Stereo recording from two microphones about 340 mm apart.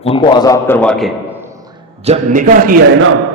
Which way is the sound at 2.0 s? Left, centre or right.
Right.